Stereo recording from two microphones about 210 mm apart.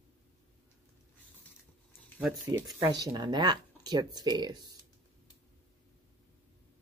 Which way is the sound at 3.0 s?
20° right (ahead or behind).